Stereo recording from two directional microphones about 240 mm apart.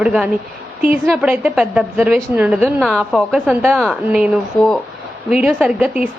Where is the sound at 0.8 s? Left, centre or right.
Centre.